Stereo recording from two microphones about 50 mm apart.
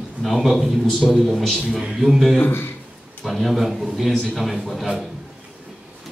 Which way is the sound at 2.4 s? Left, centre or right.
Left.